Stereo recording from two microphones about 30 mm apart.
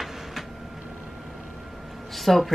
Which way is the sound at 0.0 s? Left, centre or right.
Centre.